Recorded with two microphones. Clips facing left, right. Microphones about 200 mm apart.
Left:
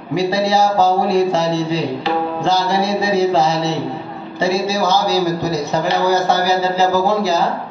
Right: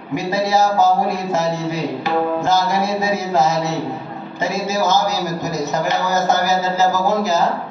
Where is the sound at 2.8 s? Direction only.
10° left (ahead or behind).